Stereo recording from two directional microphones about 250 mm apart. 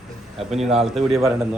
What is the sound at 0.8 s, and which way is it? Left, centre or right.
Speech, centre.